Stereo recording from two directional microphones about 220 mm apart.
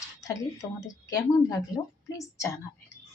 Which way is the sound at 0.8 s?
15° left (ahead or behind).